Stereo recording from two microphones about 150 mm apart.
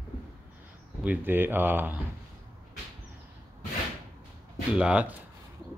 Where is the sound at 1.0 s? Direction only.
10° right (ahead or behind).